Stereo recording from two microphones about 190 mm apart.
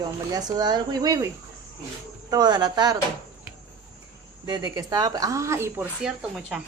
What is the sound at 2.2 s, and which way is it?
Speech, 20° right (ahead or behind).